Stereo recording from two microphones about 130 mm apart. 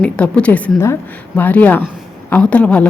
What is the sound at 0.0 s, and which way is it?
A woman's voice, 10° left (ahead or behind).